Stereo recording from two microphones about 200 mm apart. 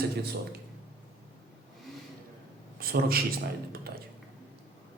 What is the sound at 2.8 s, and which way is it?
Speech, 50° right (ahead or behind).